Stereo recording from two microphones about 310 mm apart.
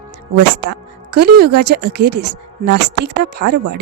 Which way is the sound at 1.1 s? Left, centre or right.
Right.